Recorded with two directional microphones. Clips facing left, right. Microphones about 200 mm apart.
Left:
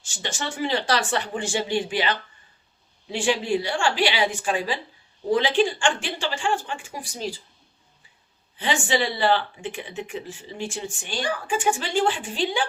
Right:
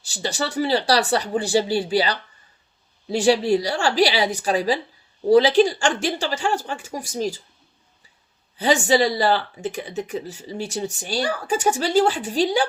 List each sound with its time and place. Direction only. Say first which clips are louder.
0.0 s speech: right 5 dB; 35° right (ahead or behind)
8.5 s speech: right 6 dB; 40° right (ahead or behind)